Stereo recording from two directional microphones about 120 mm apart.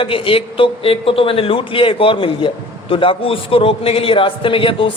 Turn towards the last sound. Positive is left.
turn(degrees=45)  # may be behind; listen again after turning